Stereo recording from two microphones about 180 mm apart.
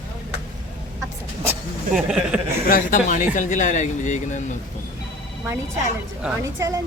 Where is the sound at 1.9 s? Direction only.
5° right (ahead or behind).